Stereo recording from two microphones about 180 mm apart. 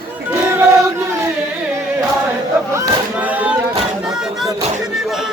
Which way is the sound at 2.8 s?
10° right (ahead or behind).